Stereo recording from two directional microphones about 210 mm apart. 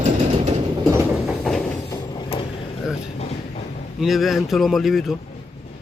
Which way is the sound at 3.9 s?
Centre (ahead or behind).